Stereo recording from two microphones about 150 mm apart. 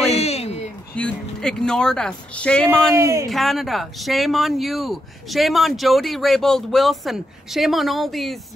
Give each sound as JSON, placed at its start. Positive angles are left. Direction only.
{"t": 0.0, "sound": "a sound", "side_deg": 45}
{"t": 0.9, "sound": "speech", "side_deg": 5}
{"t": 2.9, "sound": "speech", "side_deg": -20}
{"t": 3.3, "sound": "speech", "side_deg": 0}